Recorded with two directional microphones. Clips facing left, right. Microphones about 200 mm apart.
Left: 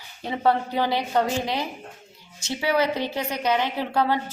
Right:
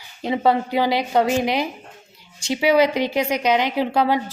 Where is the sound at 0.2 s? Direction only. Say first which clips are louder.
Right 4 dB; 15° right (ahead or behind).